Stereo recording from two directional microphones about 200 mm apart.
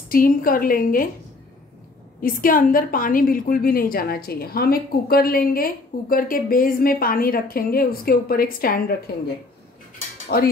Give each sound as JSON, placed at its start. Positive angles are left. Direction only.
{"t": 0.1, "sound": "a woman's voice", "side_deg": 45}
{"t": 2.2, "sound": "a woman's voice", "side_deg": 45}
{"t": 10.2, "sound": "speech", "side_deg": 50}